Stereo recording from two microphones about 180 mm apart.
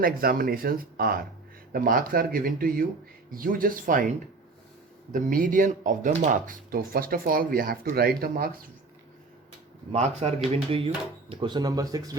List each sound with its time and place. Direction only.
0.0 s speech: 55° right (ahead or behind)
5.1 s speech: 50° right (ahead or behind)
9.9 s speech: 40° right (ahead or behind); by 12.1 s 20° right (ahead or behind)